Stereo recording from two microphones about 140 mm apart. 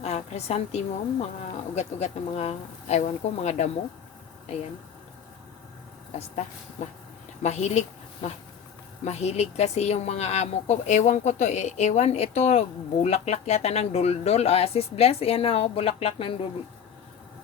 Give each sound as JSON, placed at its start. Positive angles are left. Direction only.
{"t": 0.0, "sound": "a woman's voice", "side_deg": 50}
{"t": 6.1, "sound": "a woman's voice", "side_deg": 55}
{"t": 9.0, "sound": "a woman's voice", "side_deg": 50}